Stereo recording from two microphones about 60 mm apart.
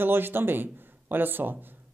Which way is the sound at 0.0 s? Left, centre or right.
Right.